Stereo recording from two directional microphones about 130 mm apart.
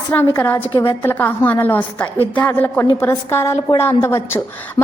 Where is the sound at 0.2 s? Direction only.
15° left (ahead or behind).